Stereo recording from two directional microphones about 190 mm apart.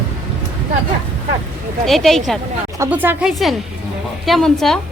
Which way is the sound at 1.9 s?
Centre (ahead or behind).